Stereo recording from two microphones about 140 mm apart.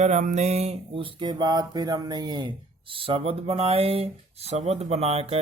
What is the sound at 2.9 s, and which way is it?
Speech, 40° right (ahead or behind).